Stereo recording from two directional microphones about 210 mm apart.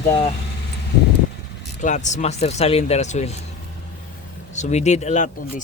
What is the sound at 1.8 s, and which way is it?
Speech, 35° left (ahead or behind).